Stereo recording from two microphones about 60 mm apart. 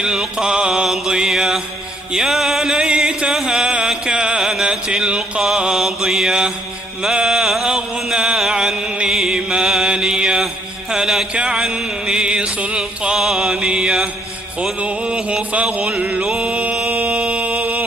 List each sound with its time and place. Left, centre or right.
0.0 s mantra: centre
2.1 s music: centre
5.4 s mantra: centre
9.0 s music: centre
9.8 s mantra: centre
10.9 s a sound: centre
11.3 s mantra: centre
16.2 s mantra: centre
16.5 s mantra: right
16.8 s a sound: right